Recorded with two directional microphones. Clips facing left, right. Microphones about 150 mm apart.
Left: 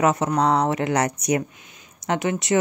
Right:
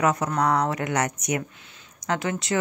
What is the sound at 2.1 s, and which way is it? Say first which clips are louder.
Speech: left 4 dB; 20° left (ahead or behind).